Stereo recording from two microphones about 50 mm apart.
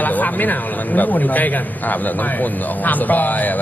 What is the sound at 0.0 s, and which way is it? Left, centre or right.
A man's voice, left.